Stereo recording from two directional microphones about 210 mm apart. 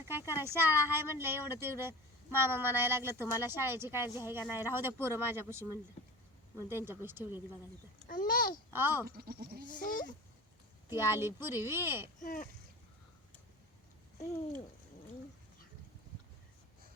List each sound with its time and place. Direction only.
0.0 s speech: 10° right (ahead or behind)
6.7 s speech: 10° right (ahead or behind)
8.0 s a child's voice: 40° left (ahead or behind)
8.7 s speech: 10° right (ahead or behind)
9.0 s speech: 45° right (ahead or behind)
9.8 s a child's voice: 40° left (ahead or behind)
10.9 s speech: 10° right (ahead or behind)
12.2 s a child's voice: 40° left (ahead or behind)